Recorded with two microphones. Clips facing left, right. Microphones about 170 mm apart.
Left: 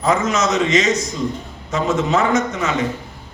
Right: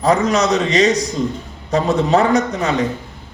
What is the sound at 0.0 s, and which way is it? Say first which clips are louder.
A man's voice: right 3 dB; 35° right (ahead or behind).